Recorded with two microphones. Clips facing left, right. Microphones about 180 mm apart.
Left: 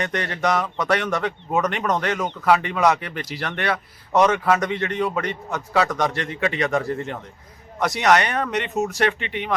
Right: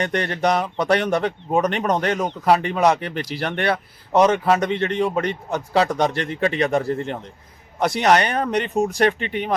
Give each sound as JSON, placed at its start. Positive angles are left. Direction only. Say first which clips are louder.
{"t": 0.0, "sound": "a man's voice", "louder": "right 3 dB", "side_deg": -30}